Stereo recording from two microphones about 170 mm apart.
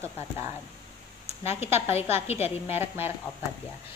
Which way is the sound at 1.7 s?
40° left (ahead or behind).